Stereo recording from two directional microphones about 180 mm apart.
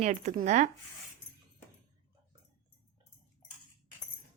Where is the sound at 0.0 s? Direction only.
40° right (ahead or behind).